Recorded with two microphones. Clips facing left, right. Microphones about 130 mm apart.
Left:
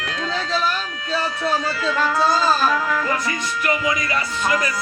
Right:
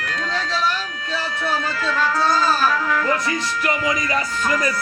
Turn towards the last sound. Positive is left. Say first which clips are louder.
# even
turn(degrees=15)  # may be behind; listen again after turning